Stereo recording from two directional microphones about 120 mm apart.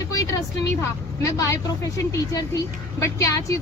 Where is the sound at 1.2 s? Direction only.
25° left (ahead or behind).